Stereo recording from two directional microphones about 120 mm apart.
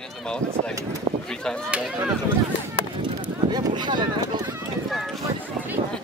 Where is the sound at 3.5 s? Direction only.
40° right (ahead or behind).